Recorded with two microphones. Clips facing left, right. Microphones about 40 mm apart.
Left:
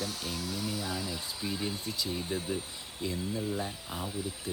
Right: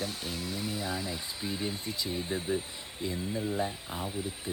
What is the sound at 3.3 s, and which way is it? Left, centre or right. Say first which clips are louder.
Speech: right 2 dB; centre.